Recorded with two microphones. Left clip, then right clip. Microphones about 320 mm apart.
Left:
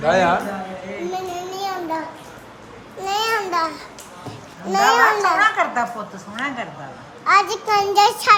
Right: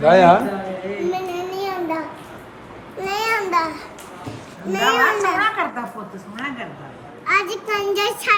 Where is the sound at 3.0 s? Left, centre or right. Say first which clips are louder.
Left 1 dB; centre.